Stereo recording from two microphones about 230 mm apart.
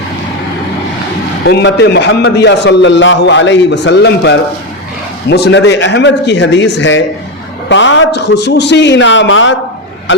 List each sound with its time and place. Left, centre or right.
1.5 s a man's voice: left